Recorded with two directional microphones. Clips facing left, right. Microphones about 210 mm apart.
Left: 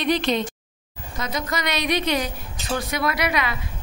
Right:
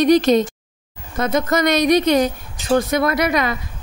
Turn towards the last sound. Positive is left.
turn(degrees=-45)  # may be behind; listen again after turning